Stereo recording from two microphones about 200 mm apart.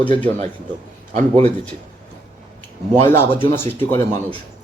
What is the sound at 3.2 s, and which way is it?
Speech, 10° left (ahead or behind).